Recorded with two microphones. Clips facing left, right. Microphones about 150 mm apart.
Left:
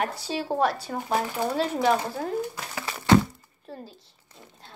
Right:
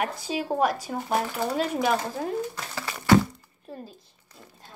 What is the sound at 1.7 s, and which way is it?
Child singing, 10° right (ahead or behind).